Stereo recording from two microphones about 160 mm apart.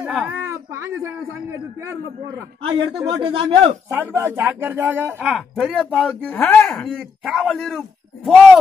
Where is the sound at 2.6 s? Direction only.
30° right (ahead or behind).